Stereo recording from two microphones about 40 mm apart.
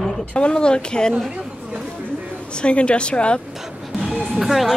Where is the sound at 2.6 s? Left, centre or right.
Left.